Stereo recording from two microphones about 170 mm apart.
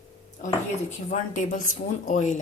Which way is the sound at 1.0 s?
45° left (ahead or behind).